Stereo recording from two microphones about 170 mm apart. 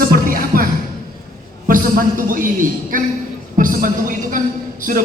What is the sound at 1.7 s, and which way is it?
Speech, 55° right (ahead or behind).